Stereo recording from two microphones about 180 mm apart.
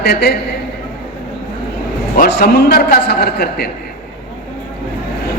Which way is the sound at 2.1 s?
55° left (ahead or behind).